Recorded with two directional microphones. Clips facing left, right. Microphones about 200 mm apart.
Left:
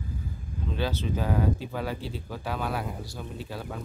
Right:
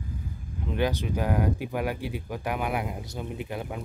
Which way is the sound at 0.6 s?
15° right (ahead or behind).